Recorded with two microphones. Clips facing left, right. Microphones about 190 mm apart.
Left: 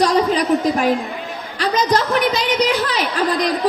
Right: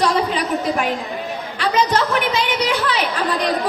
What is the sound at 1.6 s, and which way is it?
A woman's voice, 35° left (ahead or behind).